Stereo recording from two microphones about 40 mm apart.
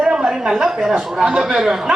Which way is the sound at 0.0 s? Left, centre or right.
Centre.